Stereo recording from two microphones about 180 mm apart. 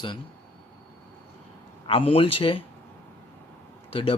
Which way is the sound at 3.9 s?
30° left (ahead or behind).